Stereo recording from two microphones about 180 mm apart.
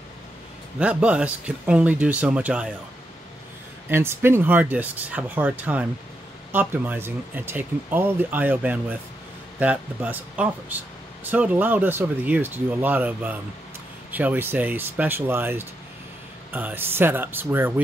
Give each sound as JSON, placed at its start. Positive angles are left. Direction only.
{"t": 0.7, "sound": "speech", "side_deg": -5}
{"t": 3.9, "sound": "speech", "side_deg": -15}